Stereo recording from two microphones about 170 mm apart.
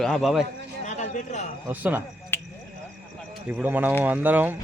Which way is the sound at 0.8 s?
45° left (ahead or behind).